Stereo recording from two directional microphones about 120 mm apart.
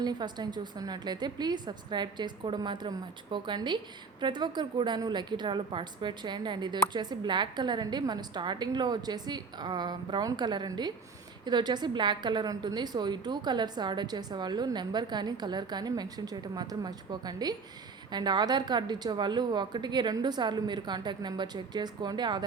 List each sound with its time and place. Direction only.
0.0 s a woman's voice: 35° right (ahead or behind)